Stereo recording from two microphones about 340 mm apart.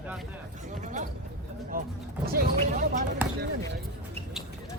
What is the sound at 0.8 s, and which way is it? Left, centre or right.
Speech, right.